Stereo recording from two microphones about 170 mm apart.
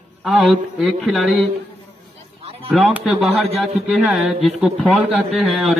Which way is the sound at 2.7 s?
10° right (ahead or behind).